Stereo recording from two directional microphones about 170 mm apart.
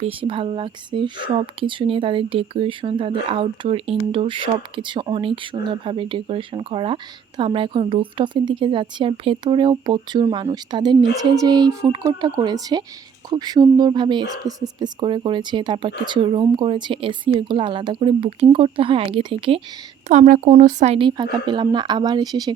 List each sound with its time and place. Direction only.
0.0 s speech: 30° right (ahead or behind)
20.1 s speech: 50° right (ahead or behind); by 22.5 s 25° right (ahead or behind)